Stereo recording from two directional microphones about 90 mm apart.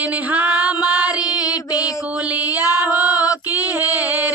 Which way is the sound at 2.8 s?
15° right (ahead or behind).